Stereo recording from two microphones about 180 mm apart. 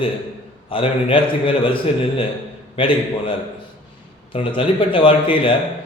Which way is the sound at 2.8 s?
30° left (ahead or behind).